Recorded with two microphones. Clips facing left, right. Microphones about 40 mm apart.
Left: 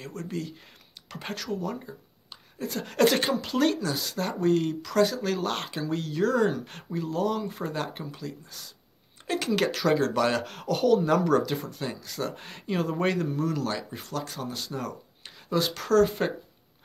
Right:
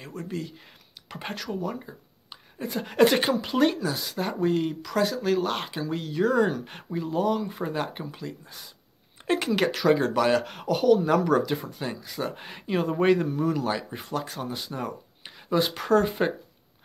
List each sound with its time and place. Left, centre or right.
0.0 s speech: centre
9.5 s speech: centre